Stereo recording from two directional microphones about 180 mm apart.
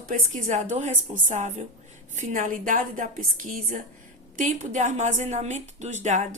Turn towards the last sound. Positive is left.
turn(degrees=-40)  # may be behind; listen again after turning